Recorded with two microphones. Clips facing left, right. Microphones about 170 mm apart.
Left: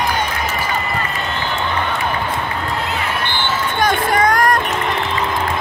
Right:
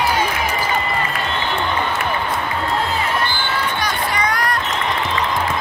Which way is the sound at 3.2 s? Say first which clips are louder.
Left 1 dB; 55° left (ahead or behind).